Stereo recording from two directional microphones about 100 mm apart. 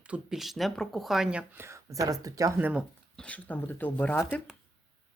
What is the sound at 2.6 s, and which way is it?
Speech, 15° right (ahead or behind).